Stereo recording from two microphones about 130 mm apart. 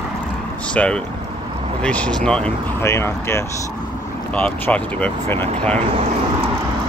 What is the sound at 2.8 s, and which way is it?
Speech, 20° left (ahead or behind).